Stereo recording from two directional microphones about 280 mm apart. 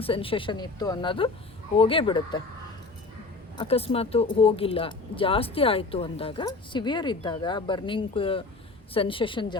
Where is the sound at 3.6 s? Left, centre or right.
Left.